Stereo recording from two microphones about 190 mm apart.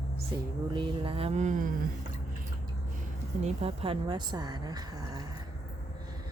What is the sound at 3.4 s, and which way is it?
A woman's voice, 30° right (ahead or behind).